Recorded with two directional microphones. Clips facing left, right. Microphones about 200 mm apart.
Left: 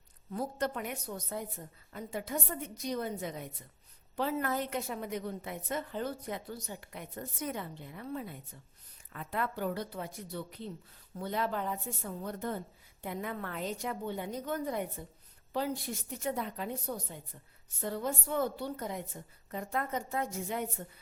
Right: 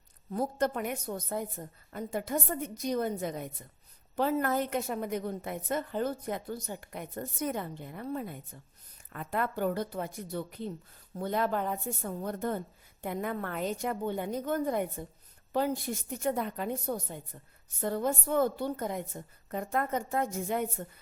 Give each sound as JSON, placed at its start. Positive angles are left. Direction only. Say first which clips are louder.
{"t": 0.3, "sound": "a woman's voice", "louder": "right 4 dB", "side_deg": -50}